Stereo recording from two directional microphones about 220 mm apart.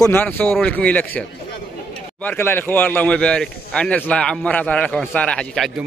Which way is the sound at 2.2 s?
10° left (ahead or behind).